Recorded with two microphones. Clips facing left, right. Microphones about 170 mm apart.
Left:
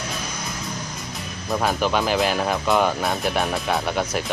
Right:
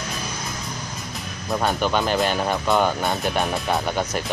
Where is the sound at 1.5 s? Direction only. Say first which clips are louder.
Even; centre (ahead or behind).